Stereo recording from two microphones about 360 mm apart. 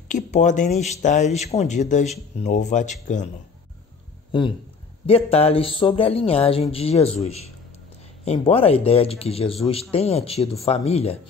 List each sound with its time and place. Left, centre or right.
0.1 s speech: centre
4.3 s speech: centre